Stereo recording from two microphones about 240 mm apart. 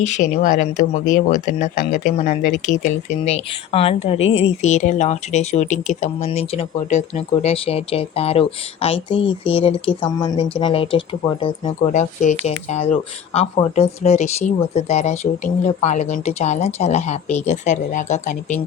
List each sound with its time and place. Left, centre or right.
0.0 s speech: left